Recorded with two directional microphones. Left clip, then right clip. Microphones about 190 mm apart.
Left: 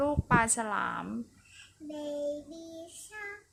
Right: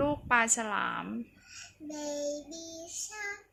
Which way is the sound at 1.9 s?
25° left (ahead or behind).